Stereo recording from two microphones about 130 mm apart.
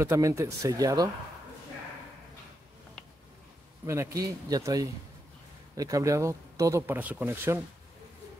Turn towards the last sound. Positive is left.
turn(degrees=-15)  # may be behind; listen again after turning